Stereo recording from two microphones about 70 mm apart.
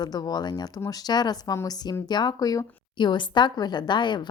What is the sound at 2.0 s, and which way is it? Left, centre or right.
Speech, left.